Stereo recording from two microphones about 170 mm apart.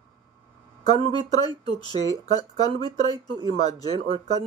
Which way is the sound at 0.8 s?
25° left (ahead or behind).